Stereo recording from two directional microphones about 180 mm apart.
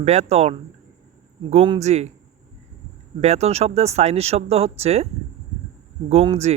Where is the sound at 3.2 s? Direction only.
35° right (ahead or behind).